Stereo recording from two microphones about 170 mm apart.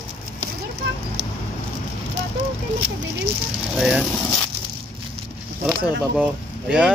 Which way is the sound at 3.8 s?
5° right (ahead or behind).